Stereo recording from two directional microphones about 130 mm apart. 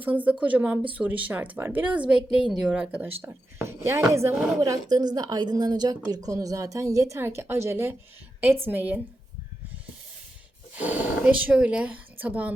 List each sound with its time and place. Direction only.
0.0 s a woman's voice: 10° right (ahead or behind)
10.8 s speech: 10° right (ahead or behind)